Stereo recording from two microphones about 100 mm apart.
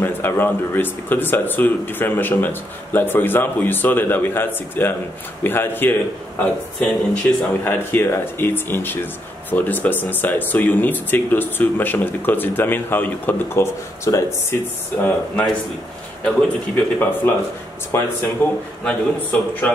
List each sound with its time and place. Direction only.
0.0 s speech: 20° left (ahead or behind)
18.9 s a man's voice: 15° left (ahead or behind)